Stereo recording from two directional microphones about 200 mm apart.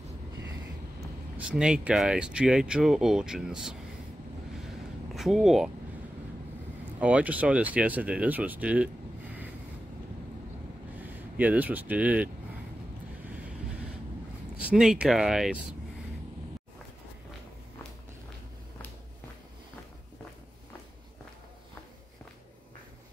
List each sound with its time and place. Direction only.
1.0 s speech: 5° right (ahead or behind)
5.1 s speech: centre (ahead or behind)
7.0 s speech: 5° right (ahead or behind)
11.0 s speech: 5° right (ahead or behind)
14.7 s speech: 5° right (ahead or behind)